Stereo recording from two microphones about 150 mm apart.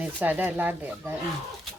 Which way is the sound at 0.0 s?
10° right (ahead or behind).